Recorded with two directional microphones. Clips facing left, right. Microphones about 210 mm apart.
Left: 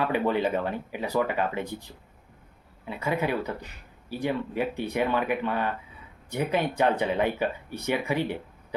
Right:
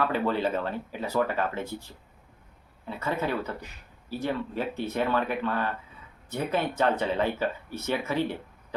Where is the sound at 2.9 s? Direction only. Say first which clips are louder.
Left 2 dB; 10° left (ahead or behind).